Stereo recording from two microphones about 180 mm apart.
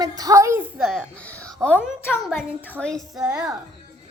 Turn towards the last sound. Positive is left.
turn(degrees=-5)  # may be behind; listen again after turning